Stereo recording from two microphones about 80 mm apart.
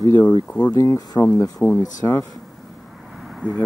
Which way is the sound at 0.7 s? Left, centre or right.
Left.